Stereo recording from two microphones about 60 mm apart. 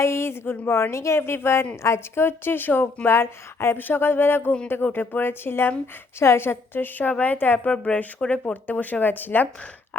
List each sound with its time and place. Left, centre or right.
0.0 s a woman's voice: left
3.8 s a woman's voice: left
7.6 s speech: centre
8.6 s a woman's voice: left